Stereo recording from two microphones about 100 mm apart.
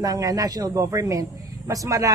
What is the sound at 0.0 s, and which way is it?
A woman's voice, 35° right (ahead or behind).